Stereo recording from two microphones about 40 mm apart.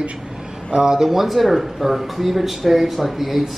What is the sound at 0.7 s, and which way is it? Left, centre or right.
Speech, centre.